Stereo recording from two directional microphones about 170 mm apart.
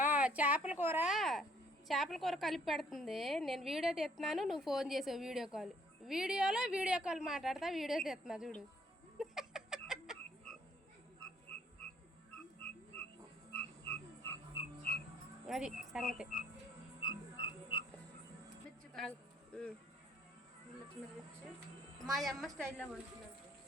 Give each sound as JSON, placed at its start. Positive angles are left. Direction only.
{"t": 0.0, "sound": "a sound", "side_deg": -10}
{"t": 0.7, "sound": "speech", "side_deg": -10}
{"t": 1.1, "sound": "a woman's voice", "side_deg": 0}
{"t": 9.1, "sound": "music", "side_deg": 0}
{"t": 11.5, "sound": "frog", "side_deg": 5}
{"t": 15.4, "sound": "a woman's voice", "side_deg": 0}
{"t": 17.0, "sound": "frog", "side_deg": 25}
{"t": 22.1, "sound": "a woman's voice", "side_deg": 0}